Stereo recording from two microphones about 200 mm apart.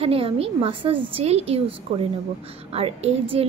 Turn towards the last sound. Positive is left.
turn(degrees=-30)  # may be behind; listen again after turning